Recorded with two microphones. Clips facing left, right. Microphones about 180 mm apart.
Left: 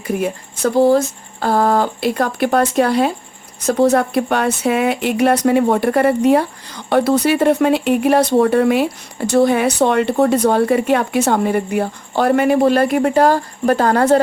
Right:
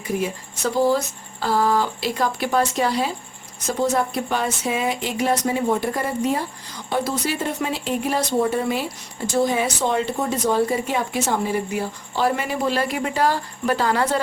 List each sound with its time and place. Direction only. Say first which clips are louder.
0.1 s speech: left 5 dB; 60° left (ahead or behind)